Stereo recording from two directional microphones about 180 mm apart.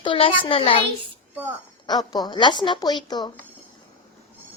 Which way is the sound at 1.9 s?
20° left (ahead or behind).